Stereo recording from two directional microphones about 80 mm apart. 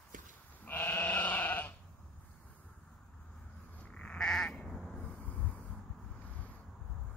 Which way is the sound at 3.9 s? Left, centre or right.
Centre.